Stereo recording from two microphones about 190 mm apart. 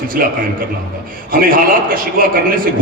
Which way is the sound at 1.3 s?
45° right (ahead or behind).